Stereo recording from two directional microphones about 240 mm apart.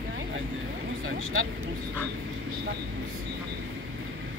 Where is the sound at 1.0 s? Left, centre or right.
Right.